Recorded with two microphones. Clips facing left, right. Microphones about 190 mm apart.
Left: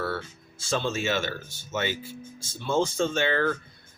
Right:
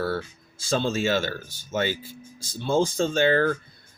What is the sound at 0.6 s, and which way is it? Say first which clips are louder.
Speech: right 3 dB; 35° right (ahead or behind).